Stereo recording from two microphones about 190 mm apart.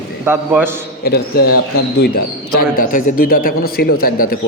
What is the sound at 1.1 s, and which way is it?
Speech, 55° left (ahead or behind).